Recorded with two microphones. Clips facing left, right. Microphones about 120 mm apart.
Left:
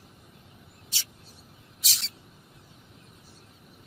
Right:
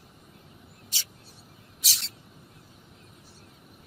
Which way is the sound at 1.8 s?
Centre (ahead or behind).